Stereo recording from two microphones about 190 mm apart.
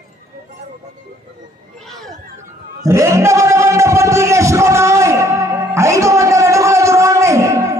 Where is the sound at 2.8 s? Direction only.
15° right (ahead or behind).